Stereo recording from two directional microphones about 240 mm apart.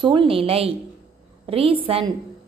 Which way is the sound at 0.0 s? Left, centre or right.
Right.